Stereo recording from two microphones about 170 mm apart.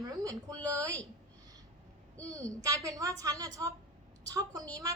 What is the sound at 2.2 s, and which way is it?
A woman's voice, 20° right (ahead or behind).